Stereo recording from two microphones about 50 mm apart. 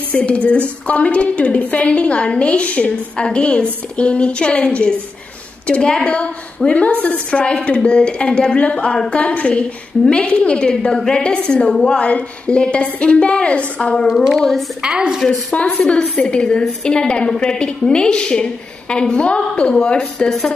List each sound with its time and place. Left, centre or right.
0.1 s a woman's voice: left
14.4 s a woman's voice: centre
14.8 s a woman's voice: centre
15.2 s a woman's voice: centre
20.2 s a woman's voice: centre